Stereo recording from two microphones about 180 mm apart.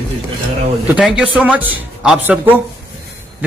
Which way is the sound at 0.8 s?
5° right (ahead or behind).